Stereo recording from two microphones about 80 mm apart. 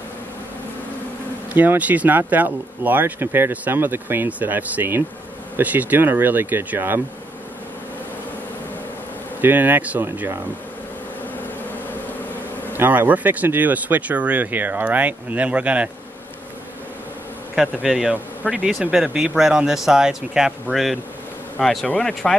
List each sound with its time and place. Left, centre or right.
1.5 s speech: right
9.4 s speech: right
12.7 s speech: right
17.6 s speech: centre